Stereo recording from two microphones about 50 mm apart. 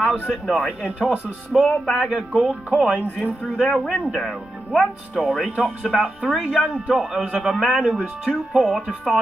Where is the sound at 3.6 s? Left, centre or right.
Centre.